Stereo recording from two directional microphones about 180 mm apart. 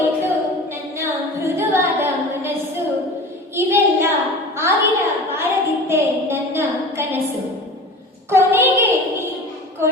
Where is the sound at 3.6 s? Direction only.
15° right (ahead or behind).